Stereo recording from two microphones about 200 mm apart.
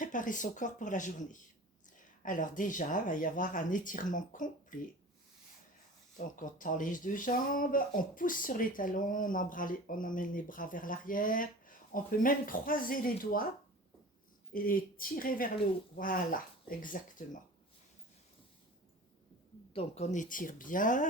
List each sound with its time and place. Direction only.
0.0 s speech: 40° left (ahead or behind)
6.1 s speech: 40° left (ahead or behind)
14.5 s speech: 45° left (ahead or behind)
19.7 s speech: 35° left (ahead or behind)